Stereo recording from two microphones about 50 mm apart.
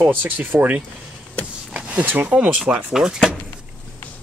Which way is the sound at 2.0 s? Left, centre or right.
Right.